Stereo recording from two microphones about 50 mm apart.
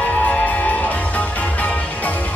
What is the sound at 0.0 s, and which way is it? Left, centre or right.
Music, left.